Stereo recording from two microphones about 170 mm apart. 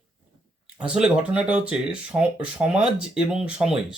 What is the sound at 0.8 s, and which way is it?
Speech, 5° right (ahead or behind).